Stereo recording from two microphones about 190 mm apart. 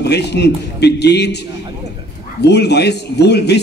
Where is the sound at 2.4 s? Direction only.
60° left (ahead or behind).